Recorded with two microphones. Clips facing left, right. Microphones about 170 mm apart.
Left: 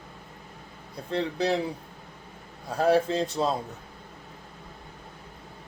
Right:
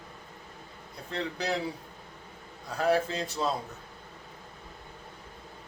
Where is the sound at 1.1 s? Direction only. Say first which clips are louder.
Left 6 dB; 25° left (ahead or behind).